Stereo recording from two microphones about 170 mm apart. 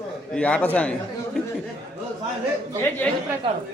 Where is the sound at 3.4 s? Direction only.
30° right (ahead or behind).